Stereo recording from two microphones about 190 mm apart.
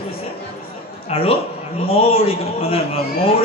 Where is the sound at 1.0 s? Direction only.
30° left (ahead or behind).